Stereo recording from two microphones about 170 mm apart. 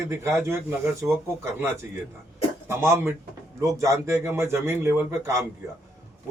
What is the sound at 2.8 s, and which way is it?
A man's voice, 15° right (ahead or behind).